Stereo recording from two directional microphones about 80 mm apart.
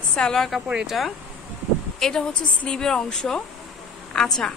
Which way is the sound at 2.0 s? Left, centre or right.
Centre.